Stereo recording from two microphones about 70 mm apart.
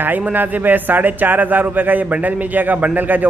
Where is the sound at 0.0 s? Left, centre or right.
Right.